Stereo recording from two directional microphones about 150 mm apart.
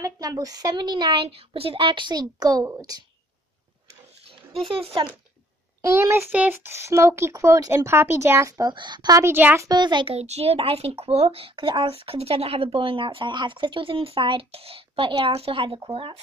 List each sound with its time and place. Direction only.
0.0 s a woman's voice: 25° right (ahead or behind)
4.6 s a child's voice: 40° right (ahead or behind)
5.8 s a child's voice: 20° right (ahead or behind)
9.7 s a child's voice: 30° right (ahead or behind)